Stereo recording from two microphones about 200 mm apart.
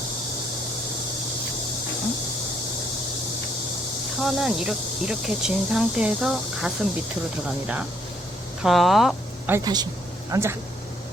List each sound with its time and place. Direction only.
4.2 s speech: centre (ahead or behind)
9.5 s speech: 20° right (ahead or behind)